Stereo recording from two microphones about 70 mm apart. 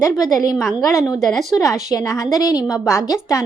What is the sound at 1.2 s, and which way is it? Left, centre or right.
Speech, centre.